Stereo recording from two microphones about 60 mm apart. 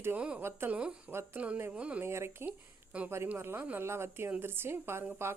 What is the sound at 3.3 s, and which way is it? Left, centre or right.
Speech, right.